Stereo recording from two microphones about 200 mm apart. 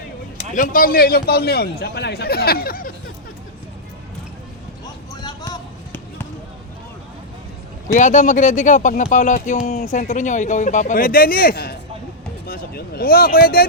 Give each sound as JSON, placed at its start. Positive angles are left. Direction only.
{"t": 0.5, "sound": "a man's voice", "side_deg": 45}
{"t": 5.2, "sound": "a sound", "side_deg": 20}
{"t": 7.9, "sound": "speech", "side_deg": 40}